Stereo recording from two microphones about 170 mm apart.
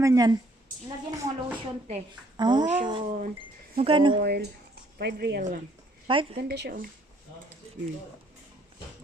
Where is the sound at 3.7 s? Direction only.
30° right (ahead or behind).